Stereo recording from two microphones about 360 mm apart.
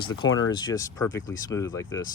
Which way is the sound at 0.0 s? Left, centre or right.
Left.